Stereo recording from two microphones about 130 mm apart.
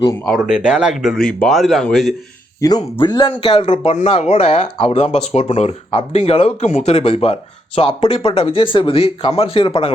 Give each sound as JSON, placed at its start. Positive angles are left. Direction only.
{"t": 0.3, "sound": "speech", "side_deg": -5}
{"t": 1.0, "sound": "speech", "side_deg": 5}
{"t": 2.6, "sound": "speech", "side_deg": 30}